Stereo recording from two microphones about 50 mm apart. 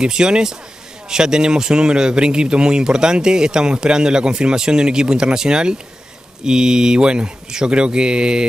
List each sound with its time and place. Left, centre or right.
0.0 s speech: centre